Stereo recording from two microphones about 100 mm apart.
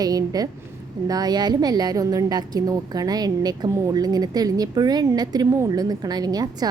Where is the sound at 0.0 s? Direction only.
40° right (ahead or behind).